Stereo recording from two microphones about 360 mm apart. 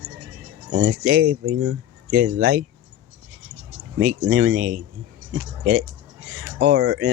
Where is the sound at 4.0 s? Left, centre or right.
Right.